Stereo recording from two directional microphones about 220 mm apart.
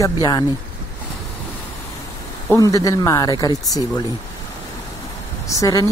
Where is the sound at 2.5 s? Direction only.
15° left (ahead or behind).